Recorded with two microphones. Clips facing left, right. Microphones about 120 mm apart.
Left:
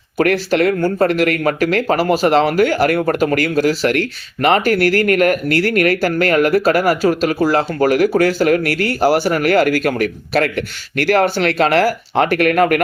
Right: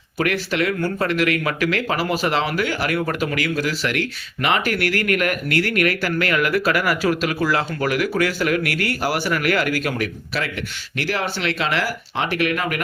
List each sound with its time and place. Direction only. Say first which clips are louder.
0.2 s speech: left 7 dB; 45° left (ahead or behind)